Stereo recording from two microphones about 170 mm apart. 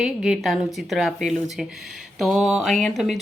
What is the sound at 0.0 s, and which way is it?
A woman's voice, 5° right (ahead or behind).